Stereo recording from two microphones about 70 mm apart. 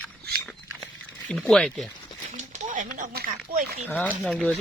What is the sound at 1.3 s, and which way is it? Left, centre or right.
Speech, centre.